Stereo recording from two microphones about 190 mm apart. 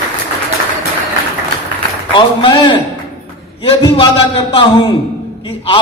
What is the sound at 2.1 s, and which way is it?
A man's voice, 25° left (ahead or behind).